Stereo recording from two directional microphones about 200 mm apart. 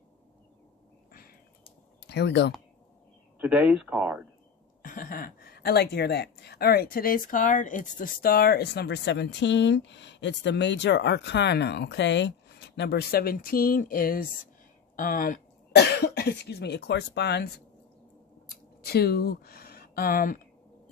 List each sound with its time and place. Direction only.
2.0 s speech: 60° left (ahead or behind)
3.3 s speech: 5° right (ahead or behind)
4.8 s a woman's voice: 45° left (ahead or behind); by 17.5 s 60° left (ahead or behind)
18.9 s speech: 50° left (ahead or behind)